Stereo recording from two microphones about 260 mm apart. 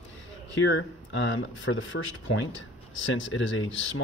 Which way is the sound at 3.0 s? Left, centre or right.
Left.